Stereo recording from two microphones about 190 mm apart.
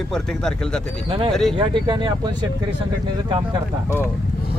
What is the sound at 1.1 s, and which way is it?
Speech, 30° right (ahead or behind).